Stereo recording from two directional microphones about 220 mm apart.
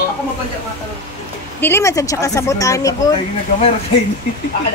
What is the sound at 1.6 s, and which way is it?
Speech, 10° left (ahead or behind).